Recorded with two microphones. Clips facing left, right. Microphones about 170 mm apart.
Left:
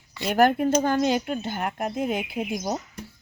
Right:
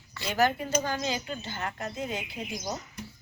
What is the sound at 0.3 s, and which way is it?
Speech, 55° left (ahead or behind).